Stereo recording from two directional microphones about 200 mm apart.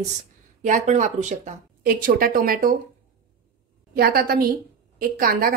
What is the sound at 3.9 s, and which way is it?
Speech, 50° right (ahead or behind).